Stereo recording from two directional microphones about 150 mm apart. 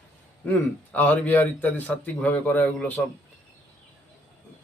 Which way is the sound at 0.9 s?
10° left (ahead or behind).